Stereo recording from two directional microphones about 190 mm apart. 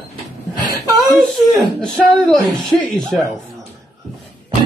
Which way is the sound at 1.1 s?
Centre (ahead or behind).